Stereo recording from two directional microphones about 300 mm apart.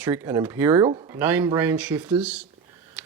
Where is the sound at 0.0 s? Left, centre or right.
Centre.